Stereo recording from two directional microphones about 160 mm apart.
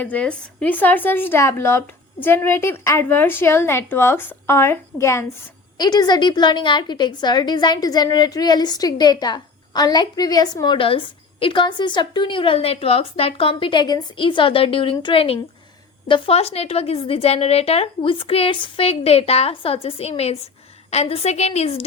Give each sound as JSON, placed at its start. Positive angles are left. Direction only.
{"t": 0.0, "sound": "a woman's voice", "side_deg": 10}